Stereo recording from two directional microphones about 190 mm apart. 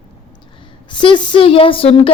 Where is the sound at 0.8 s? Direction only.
25° left (ahead or behind).